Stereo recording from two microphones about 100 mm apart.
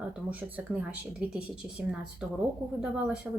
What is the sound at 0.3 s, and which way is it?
Speech, 15° right (ahead or behind).